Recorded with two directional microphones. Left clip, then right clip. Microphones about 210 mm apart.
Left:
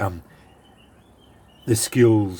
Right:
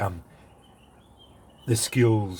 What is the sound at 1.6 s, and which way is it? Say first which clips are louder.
Speech: left 6 dB; 40° left (ahead or behind).